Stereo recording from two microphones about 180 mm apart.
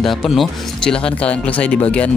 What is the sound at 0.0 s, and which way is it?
Speech, centre (ahead or behind).